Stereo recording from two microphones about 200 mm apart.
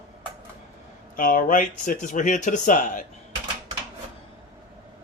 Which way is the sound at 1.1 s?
45° left (ahead or behind).